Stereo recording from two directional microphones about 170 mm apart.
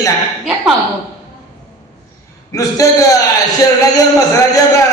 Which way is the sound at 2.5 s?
20° left (ahead or behind).